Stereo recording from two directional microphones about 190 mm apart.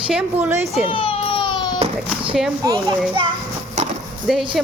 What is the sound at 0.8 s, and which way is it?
Baby cry, 30° left (ahead or behind).